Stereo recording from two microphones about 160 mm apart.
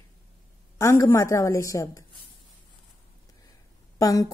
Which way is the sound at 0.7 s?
20° left (ahead or behind).